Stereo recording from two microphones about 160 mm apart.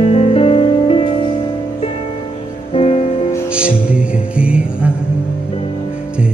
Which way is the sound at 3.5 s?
5° right (ahead or behind).